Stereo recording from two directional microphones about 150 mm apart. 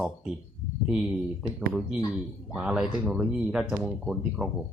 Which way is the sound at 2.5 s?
5° right (ahead or behind).